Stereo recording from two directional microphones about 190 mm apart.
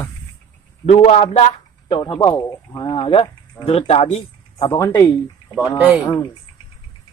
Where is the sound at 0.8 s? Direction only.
35° left (ahead or behind).